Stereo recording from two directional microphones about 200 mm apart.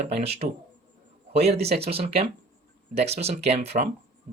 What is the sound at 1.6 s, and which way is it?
Speech, 30° right (ahead or behind).